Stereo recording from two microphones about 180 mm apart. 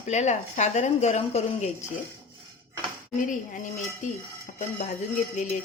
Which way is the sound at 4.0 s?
45° left (ahead or behind).